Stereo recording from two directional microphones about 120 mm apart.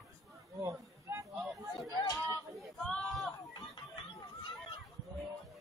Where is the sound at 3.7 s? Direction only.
40° left (ahead or behind).